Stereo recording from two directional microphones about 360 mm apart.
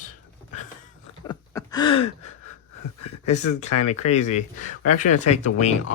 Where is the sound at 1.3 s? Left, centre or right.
Centre.